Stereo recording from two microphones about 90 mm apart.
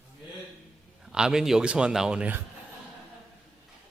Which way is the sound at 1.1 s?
5° right (ahead or behind).